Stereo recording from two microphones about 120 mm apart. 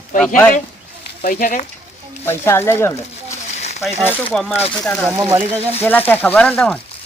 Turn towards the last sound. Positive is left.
turn(degrees=10)  # may be behind; listen again after turning